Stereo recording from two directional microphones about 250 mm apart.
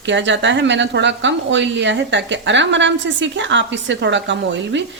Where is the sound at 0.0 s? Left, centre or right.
Right.